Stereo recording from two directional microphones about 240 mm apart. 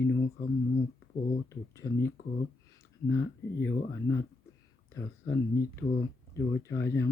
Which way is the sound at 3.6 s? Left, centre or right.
Left.